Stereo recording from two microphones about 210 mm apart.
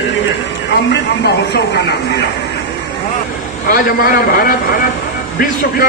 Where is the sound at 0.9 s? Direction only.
55° left (ahead or behind).